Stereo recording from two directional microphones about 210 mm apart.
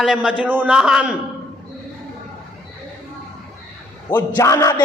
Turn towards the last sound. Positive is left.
turn(degrees=15)  # may be behind; listen again after turning